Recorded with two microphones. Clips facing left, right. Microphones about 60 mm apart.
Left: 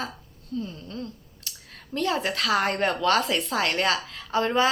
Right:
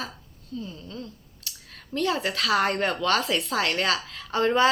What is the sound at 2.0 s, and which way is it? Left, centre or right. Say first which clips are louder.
A woman's voice: even; left.